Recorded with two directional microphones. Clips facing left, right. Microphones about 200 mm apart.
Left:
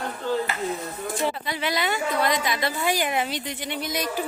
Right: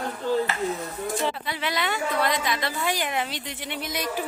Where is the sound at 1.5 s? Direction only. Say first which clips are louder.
Left 2 dB; centre (ahead or behind).